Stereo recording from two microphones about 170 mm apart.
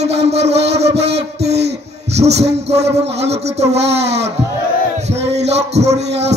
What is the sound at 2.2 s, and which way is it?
A man's voice, 40° right (ahead or behind).